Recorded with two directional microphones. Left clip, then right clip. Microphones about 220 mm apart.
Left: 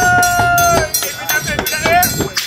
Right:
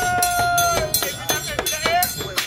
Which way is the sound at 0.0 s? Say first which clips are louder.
Left 8 dB; 30° right (ahead or behind).